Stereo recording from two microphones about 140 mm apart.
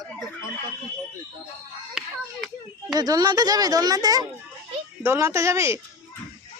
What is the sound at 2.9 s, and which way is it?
Speech, 25° right (ahead or behind).